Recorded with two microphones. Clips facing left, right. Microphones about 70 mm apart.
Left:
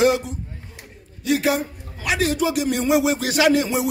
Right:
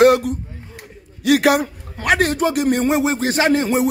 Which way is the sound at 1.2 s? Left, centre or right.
Right.